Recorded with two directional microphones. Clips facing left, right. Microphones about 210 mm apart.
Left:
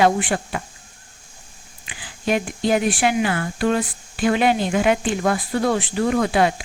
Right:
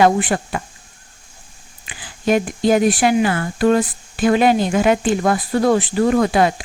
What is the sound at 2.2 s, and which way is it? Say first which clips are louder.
Speech: right 4 dB; 40° right (ahead or behind).